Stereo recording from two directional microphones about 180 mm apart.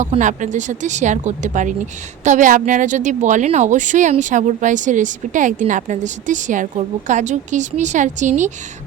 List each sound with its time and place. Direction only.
0.0 s speech: 40° right (ahead or behind)